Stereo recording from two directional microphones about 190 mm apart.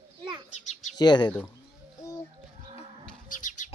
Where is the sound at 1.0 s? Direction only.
20° left (ahead or behind).